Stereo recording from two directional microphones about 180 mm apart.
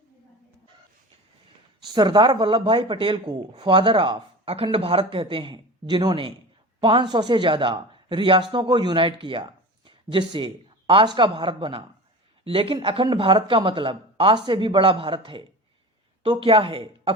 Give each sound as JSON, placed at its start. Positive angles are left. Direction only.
{"t": 1.9, "sound": "a man's voice", "side_deg": -25}